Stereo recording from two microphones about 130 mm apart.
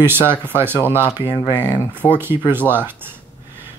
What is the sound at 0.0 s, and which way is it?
Speech, 15° right (ahead or behind).